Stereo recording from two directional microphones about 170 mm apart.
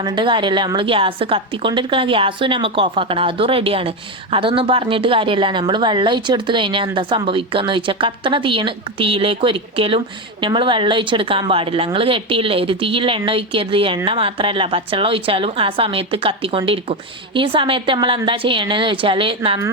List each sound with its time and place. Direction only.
0.0 s a woman's voice: 30° right (ahead or behind)